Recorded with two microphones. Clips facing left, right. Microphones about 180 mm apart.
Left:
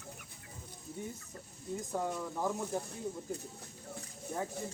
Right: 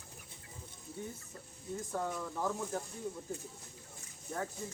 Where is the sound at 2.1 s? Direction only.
10° left (ahead or behind).